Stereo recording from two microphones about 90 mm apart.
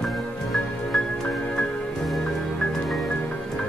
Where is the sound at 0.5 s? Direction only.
5° left (ahead or behind).